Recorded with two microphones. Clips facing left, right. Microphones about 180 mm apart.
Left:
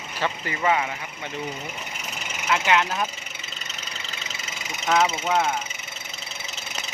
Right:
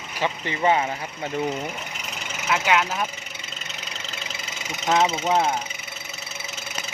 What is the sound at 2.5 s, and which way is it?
Speech, 10° right (ahead or behind).